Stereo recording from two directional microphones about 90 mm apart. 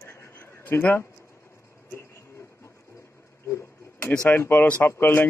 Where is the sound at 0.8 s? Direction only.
20° left (ahead or behind).